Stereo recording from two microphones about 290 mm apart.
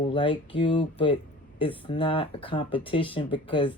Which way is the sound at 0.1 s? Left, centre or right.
Centre.